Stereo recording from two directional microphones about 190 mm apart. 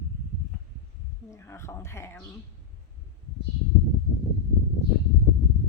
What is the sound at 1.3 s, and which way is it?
Speech, 15° left (ahead or behind).